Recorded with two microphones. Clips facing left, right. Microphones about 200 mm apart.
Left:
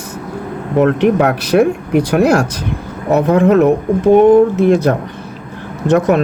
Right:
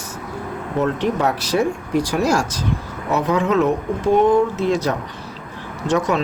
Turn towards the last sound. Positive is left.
turn(degrees=60)  # may be behind; listen again after turning